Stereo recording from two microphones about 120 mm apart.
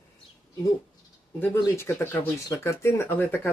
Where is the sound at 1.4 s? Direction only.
20° left (ahead or behind).